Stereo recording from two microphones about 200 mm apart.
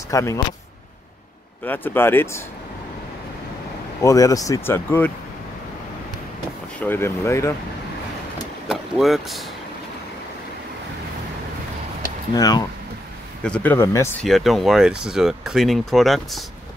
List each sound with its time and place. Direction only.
0.1 s speech: 15° left (ahead or behind)
1.6 s speech: 10° left (ahead or behind)
4.0 s speech: 15° left (ahead or behind)
6.8 s speech: 10° left (ahead or behind)
8.6 s speech: centre (ahead or behind)
12.4 s speech: 20° left (ahead or behind)
13.4 s speech: 5° left (ahead or behind)
14.2 s speech: centre (ahead or behind)